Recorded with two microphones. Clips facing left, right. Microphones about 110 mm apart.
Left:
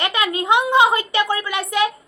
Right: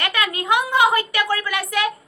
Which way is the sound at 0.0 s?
20° left (ahead or behind).